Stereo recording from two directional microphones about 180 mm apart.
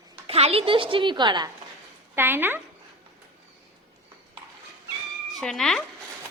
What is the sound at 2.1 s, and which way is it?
Speech, 10° right (ahead or behind).